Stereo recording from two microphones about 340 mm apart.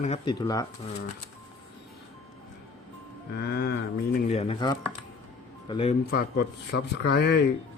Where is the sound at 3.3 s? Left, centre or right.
Left.